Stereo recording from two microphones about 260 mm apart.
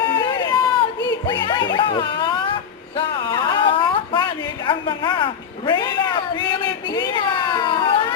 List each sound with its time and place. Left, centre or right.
0.0 s run: centre
1.0 s music: centre
1.7 s speech: centre
2.9 s a sound: centre